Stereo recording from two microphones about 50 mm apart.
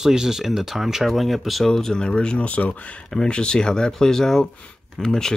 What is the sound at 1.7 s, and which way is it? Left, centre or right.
Speech, centre.